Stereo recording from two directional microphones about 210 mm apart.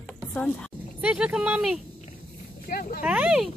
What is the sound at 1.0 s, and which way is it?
Speech, 5° right (ahead or behind).